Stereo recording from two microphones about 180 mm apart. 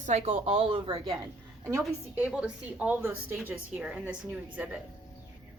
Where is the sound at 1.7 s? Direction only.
15° right (ahead or behind).